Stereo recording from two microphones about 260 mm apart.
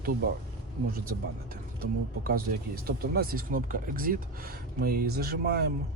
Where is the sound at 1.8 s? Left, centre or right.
Right.